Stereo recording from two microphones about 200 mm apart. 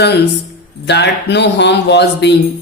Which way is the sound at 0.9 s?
55° left (ahead or behind).